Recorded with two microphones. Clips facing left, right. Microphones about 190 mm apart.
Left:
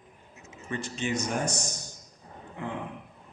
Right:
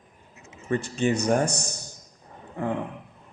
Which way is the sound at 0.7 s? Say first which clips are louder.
Right 7 dB; 50° right (ahead or behind).